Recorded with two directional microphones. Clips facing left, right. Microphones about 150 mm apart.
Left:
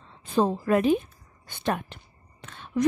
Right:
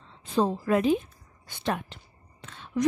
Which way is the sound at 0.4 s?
50° left (ahead or behind).